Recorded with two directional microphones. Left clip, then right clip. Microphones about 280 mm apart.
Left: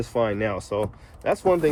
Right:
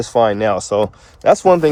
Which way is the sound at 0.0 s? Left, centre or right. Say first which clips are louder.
Right 10 dB; right.